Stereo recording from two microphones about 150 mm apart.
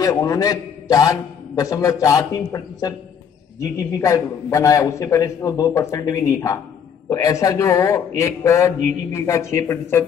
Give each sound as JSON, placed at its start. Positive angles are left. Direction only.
{"t": 0.0, "sound": "a man's voice", "side_deg": 20}